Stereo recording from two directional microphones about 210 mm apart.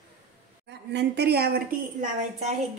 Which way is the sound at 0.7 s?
55° right (ahead or behind).